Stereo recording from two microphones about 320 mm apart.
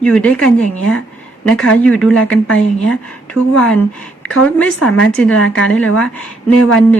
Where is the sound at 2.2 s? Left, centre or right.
Left.